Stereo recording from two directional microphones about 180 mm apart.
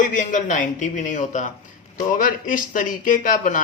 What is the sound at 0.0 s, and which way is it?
A man's voice, 45° left (ahead or behind).